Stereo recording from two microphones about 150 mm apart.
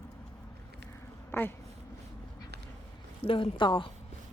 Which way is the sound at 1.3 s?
15° left (ahead or behind).